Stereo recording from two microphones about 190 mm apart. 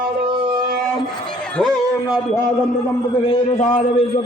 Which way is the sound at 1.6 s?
Centre (ahead or behind).